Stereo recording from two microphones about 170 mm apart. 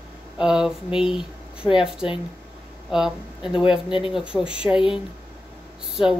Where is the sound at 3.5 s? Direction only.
30° left (ahead or behind).